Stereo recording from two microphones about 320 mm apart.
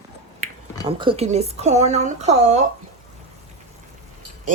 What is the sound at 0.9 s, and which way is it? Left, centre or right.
A woman's voice, centre.